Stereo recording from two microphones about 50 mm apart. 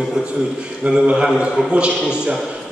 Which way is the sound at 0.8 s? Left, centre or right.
Right.